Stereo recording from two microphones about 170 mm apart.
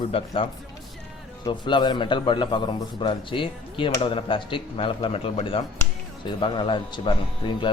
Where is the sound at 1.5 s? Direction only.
25° left (ahead or behind).